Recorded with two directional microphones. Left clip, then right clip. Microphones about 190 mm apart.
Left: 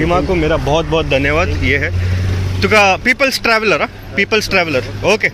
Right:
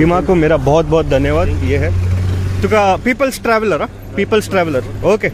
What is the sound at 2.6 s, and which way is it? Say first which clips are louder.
Speech: left 2 dB; 10° right (ahead or behind).